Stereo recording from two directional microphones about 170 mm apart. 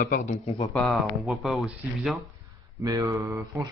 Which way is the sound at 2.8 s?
20° right (ahead or behind).